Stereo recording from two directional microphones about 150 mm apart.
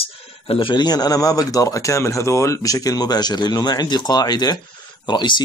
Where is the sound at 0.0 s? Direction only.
40° left (ahead or behind).